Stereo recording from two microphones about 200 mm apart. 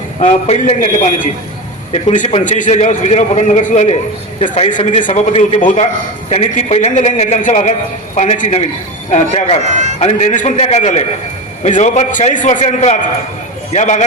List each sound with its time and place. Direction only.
0.2 s a man's voice: 35° left (ahead or behind)
9.6 s a man's voice: 35° right (ahead or behind)
10.0 s a man's voice: 35° left (ahead or behind)